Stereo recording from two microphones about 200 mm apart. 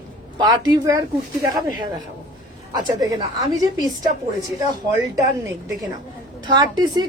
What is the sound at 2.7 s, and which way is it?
Speech, 20° right (ahead or behind).